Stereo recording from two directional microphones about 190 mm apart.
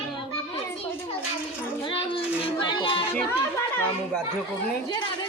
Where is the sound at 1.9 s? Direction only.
30° left (ahead or behind).